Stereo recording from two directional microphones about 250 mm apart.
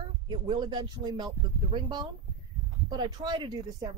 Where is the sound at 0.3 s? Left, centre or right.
Centre.